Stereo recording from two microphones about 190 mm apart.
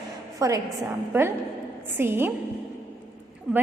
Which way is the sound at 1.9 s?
10° right (ahead or behind).